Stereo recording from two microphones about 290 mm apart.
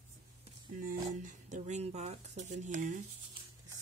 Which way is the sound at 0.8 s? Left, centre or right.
Right.